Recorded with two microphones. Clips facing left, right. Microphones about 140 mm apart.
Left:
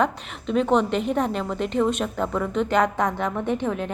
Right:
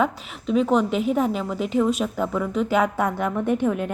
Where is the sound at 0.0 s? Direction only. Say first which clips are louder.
Even; 5° right (ahead or behind).